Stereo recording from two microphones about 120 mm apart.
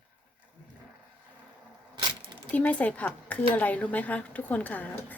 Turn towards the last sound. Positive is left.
turn(degrees=15)  # may be behind; listen again after turning